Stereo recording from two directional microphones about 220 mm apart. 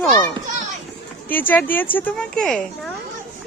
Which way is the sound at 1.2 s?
10° left (ahead or behind).